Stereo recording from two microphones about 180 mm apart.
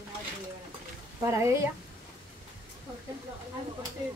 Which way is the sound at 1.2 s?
15° right (ahead or behind).